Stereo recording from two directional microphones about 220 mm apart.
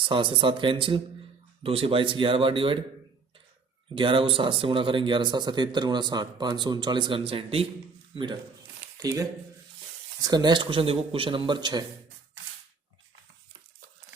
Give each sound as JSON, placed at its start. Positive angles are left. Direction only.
{"t": 0.0, "sound": "speech", "side_deg": -20}
{"t": 3.9, "sound": "speech", "side_deg": -25}